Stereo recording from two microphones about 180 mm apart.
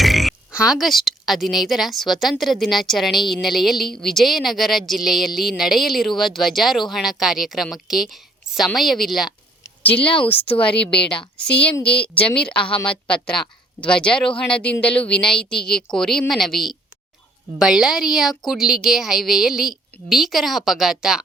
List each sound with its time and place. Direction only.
0.0 s a woman's voice: centre (ahead or behind)
10.0 s speech: 30° left (ahead or behind)
10.2 s speech: 10° left (ahead or behind)
11.8 s speech: 30° left (ahead or behind)
12.1 s a woman's voice: 5° left (ahead or behind)